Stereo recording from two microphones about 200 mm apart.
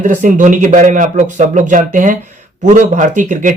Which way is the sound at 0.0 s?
40° right (ahead or behind).